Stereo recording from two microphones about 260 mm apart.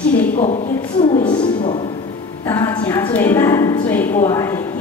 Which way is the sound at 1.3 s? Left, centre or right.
Centre.